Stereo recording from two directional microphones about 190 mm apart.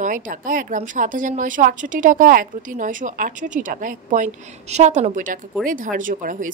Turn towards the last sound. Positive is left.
turn(degrees=-45)  # may be behind; listen again after turning